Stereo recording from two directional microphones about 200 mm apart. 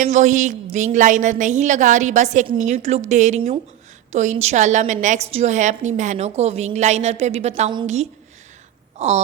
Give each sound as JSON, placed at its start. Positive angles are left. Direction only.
{"t": 0.0, "sound": "a woman's voice", "side_deg": -35}
{"t": 9.0, "sound": "wail", "side_deg": -35}